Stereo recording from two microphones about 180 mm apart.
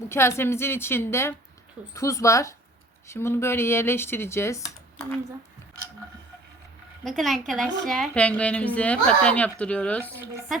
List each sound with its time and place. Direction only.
0.1 s a woman's voice: 15° left (ahead or behind)
7.0 s a woman's voice: centre (ahead or behind)